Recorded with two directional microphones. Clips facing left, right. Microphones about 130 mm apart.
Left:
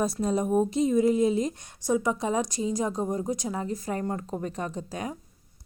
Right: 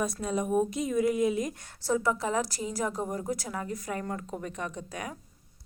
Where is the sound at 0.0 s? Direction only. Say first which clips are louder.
Left 4 dB; 35° left (ahead or behind).